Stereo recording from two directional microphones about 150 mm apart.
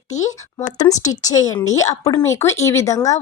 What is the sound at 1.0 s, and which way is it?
A woman's voice, 25° left (ahead or behind).